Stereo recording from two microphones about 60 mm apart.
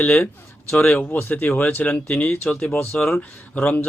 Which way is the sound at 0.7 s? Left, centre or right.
Left.